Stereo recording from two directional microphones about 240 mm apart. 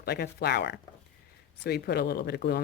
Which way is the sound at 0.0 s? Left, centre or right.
Left.